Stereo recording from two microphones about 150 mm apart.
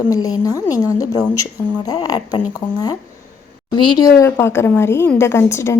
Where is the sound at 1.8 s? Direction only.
25° left (ahead or behind).